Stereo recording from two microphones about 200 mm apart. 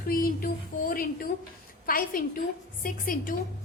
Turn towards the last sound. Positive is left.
turn(degrees=45)  # may be behind; listen again after turning